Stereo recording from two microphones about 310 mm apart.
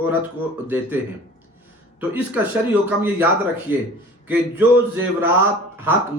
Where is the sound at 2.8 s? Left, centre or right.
Centre.